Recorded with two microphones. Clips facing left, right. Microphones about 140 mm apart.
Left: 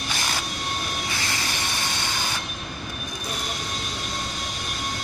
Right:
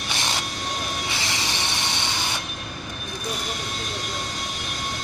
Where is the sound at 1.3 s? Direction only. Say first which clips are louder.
Right 1 dB; 25° right (ahead or behind).